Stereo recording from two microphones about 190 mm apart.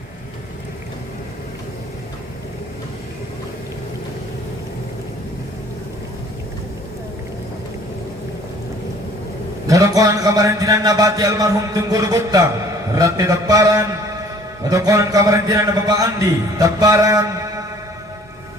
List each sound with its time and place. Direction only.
9.6 s a man's voice: 15° right (ahead or behind)